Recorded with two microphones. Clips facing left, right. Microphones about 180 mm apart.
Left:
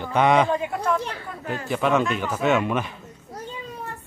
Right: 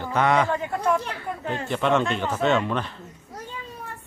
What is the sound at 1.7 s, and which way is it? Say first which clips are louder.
A man's voice: left 1 dB; 5° left (ahead or behind).